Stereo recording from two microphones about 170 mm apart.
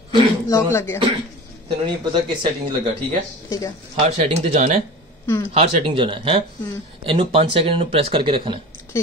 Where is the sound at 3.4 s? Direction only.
20° left (ahead or behind).